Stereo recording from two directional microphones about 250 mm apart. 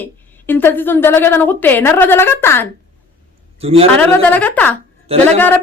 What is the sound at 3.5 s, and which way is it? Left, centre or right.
Speech, right.